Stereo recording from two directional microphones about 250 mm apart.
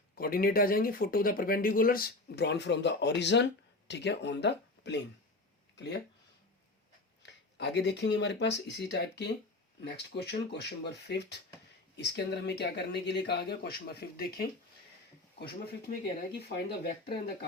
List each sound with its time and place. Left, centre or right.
0.2 s speech: left
7.2 s speech: left
15.4 s speech: left